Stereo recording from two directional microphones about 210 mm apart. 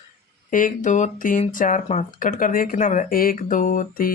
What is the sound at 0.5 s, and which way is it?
Speech, 40° left (ahead or behind).